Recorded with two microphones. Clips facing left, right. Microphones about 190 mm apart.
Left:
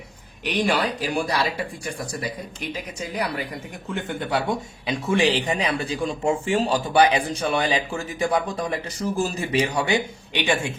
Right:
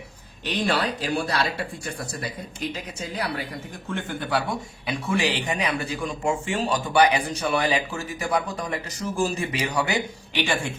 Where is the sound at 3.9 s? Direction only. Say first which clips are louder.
Left 1 dB; 25° left (ahead or behind).